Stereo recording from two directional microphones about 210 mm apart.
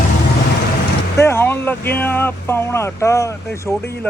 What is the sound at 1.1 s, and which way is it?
Speech, 10° left (ahead or behind).